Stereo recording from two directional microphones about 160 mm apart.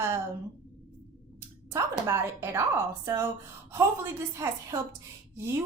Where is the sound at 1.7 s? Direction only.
20° right (ahead or behind).